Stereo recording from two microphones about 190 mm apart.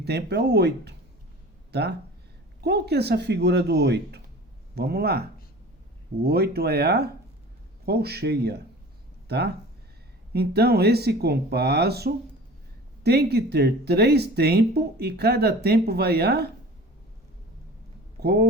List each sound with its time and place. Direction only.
0.0 s speech: 60° right (ahead or behind)
18.2 s speech: 60° right (ahead or behind)